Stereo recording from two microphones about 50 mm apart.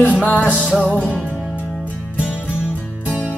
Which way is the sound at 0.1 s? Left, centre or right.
Left.